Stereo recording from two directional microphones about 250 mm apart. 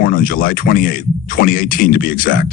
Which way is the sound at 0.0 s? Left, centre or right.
Left.